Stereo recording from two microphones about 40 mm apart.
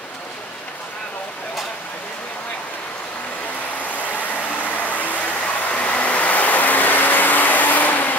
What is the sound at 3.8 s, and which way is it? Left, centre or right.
Vehicle, left.